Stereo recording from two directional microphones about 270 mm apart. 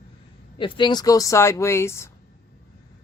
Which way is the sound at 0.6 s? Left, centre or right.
Centre.